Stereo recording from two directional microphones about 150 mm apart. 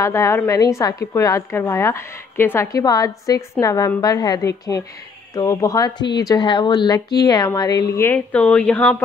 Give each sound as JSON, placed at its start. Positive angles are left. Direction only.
{"t": 0.0, "sound": "a woman's voice", "side_deg": 20}